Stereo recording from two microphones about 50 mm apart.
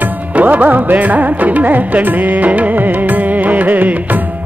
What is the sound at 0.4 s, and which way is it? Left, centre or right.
Music, right.